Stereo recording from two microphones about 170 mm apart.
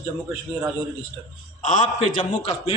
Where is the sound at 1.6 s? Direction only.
45° left (ahead or behind).